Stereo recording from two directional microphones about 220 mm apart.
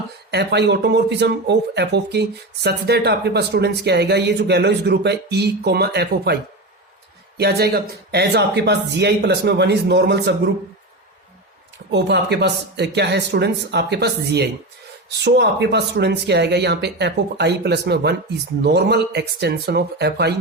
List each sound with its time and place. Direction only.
0.3 s speech: 50° right (ahead or behind)
11.9 s speech: 50° right (ahead or behind)